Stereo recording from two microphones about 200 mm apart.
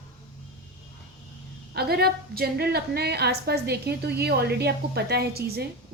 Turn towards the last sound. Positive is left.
turn(degrees=-55)  # may be behind; listen again after turning